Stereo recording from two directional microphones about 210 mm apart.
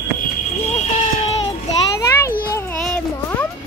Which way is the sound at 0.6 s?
30° left (ahead or behind).